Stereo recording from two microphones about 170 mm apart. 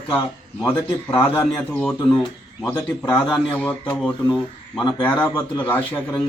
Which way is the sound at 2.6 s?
10° left (ahead or behind).